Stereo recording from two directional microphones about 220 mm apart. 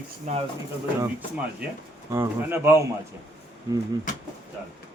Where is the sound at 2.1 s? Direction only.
10° right (ahead or behind).